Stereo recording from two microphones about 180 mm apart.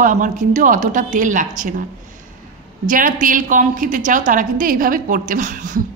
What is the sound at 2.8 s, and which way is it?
A woman's voice, 50° right (ahead or behind).